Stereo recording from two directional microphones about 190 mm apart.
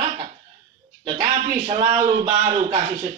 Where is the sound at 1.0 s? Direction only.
30° right (ahead or behind).